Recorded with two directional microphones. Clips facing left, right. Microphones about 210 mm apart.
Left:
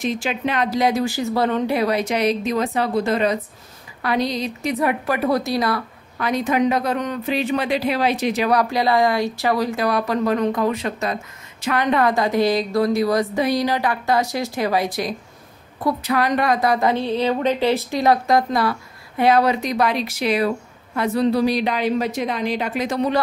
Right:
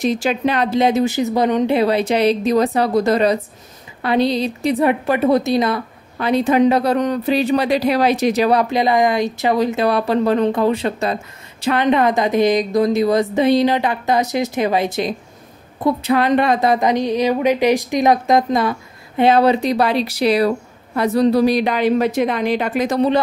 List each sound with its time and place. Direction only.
0.0 s a woman's voice: 40° right (ahead or behind)
4.0 s a woman's voice: 25° right (ahead or behind)
8.5 s speech: 25° right (ahead or behind); by 22.9 s 50° right (ahead or behind)
22.9 s speech: 30° right (ahead or behind)